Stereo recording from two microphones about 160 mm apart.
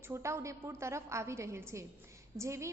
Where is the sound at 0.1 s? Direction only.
15° right (ahead or behind).